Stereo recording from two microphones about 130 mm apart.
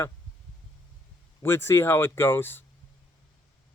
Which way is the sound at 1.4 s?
20° left (ahead or behind).